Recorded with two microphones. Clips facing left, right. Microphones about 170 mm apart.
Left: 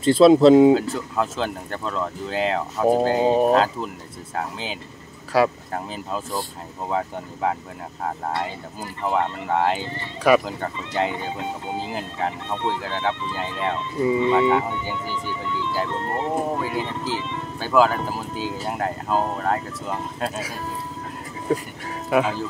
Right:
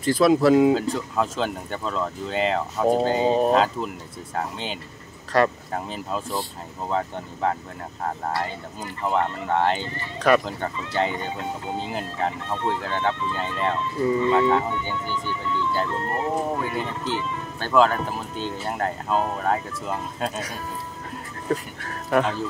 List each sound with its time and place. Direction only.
0.0 s speech: 25° left (ahead or behind)
0.7 s speech: centre (ahead or behind)
9.0 s speech: 5° left (ahead or behind)
16.5 s speech: 5° left (ahead or behind)